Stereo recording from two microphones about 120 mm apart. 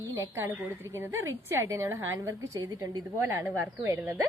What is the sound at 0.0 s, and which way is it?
A woman's voice, 25° right (ahead or behind).